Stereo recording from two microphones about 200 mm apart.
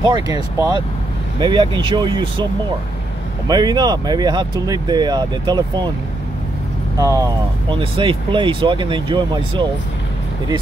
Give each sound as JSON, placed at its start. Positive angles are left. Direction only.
{"t": 0.0, "sound": "speech", "side_deg": -20}
{"t": 3.4, "sound": "speech", "side_deg": -20}
{"t": 7.0, "sound": "speech", "side_deg": -15}